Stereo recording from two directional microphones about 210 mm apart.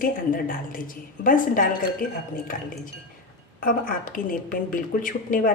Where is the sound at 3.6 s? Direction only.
40° left (ahead or behind).